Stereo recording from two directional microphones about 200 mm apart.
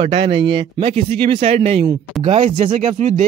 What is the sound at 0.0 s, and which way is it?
Speech, 25° right (ahead or behind).